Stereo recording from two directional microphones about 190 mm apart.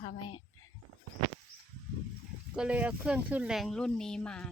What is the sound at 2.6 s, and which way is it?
Speech, 5° right (ahead or behind).